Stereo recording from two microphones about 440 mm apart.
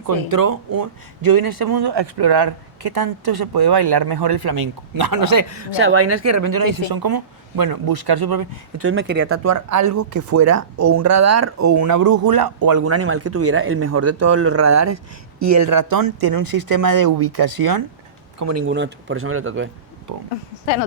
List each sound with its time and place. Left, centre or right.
0.1 s speech: right
5.5 s speech: right
8.8 s speech: right
12.8 s speech: right
18.3 s speech: right
20.1 s speech: right